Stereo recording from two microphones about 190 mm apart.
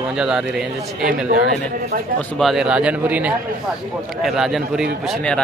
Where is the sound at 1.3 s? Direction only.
50° right (ahead or behind).